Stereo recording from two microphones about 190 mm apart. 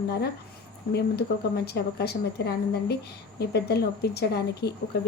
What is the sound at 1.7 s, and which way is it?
Speech, 55° left (ahead or behind).